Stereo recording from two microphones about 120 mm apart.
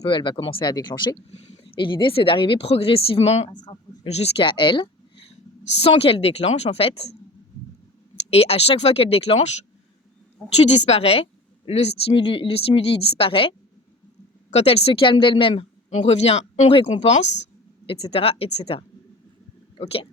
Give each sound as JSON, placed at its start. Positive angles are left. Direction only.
{"t": 0.1, "sound": "a woman's voice", "side_deg": 40}
{"t": 4.4, "sound": "a woman's voice", "side_deg": 45}
{"t": 10.4, "sound": "speech", "side_deg": 5}
{"t": 10.8, "sound": "a woman's voice", "side_deg": 60}
{"t": 16.0, "sound": "a woman's voice", "side_deg": 60}